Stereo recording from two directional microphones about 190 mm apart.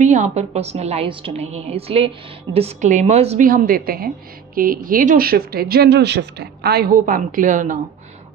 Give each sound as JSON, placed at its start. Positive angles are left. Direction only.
{"t": 0.0, "sound": "a woman's voice", "side_deg": -40}
{"t": 3.4, "sound": "speech", "side_deg": -50}